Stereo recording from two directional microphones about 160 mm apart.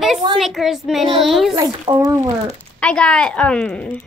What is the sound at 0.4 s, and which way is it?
Speech, centre (ahead or behind).